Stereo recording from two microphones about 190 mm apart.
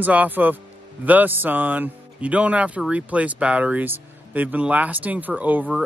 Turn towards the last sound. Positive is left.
turn(degrees=-10)  # may be behind; listen again after turning